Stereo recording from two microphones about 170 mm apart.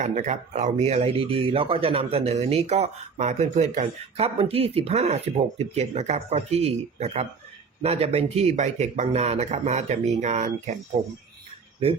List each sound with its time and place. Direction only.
0.0 s speech: 45° right (ahead or behind)